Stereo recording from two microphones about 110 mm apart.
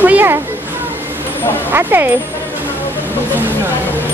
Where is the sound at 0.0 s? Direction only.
15° right (ahead or behind).